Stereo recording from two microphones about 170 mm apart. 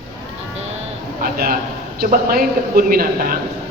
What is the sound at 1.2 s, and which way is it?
A man's voice, 60° right (ahead or behind).